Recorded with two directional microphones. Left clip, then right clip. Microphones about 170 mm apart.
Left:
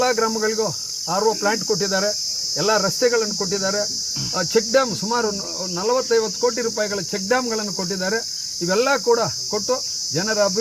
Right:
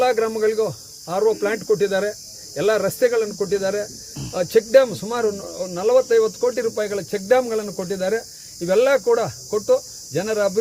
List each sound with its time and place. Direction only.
0.0 s cricket: 30° right (ahead or behind)